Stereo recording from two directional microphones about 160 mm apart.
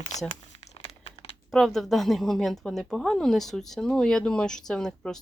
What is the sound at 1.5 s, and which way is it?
Speech, centre (ahead or behind).